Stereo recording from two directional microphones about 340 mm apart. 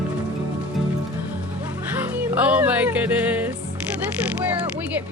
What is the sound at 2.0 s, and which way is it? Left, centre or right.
Music, centre.